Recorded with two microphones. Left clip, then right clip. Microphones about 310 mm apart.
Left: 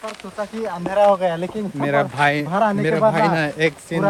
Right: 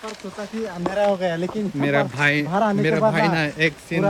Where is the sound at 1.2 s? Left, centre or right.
Centre.